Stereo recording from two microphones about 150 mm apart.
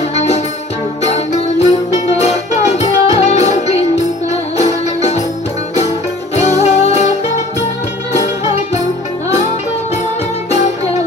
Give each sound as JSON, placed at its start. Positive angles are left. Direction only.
{"t": 1.0, "sound": "music", "side_deg": 45}
{"t": 6.6, "sound": "music", "side_deg": 45}